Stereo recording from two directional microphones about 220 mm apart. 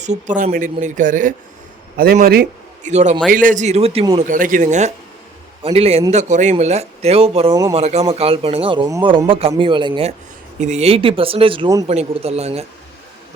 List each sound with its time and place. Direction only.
0.0 s speech: 35° right (ahead or behind)
2.9 s speech: 30° right (ahead or behind)
4.3 s speech: 35° right (ahead or behind)